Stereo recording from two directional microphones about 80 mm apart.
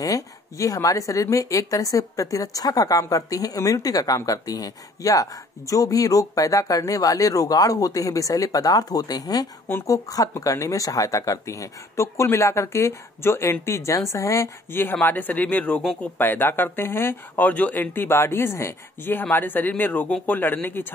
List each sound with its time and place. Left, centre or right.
0.0 s speech: left
9.7 s speech: left